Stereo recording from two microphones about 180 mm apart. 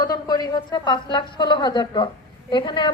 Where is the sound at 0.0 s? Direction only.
20° left (ahead or behind).